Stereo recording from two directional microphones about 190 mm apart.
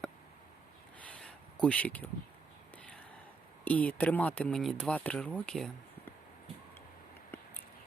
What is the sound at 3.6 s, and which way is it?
Speech, 5° left (ahead or behind).